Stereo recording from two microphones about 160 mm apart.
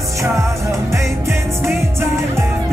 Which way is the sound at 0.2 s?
20° right (ahead or behind).